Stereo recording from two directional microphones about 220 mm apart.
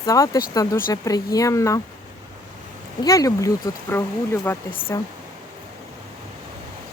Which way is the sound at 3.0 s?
15° left (ahead or behind).